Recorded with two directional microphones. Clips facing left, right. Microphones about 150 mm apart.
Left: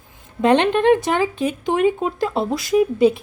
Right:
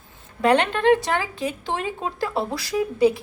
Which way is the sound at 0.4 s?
20° left (ahead or behind).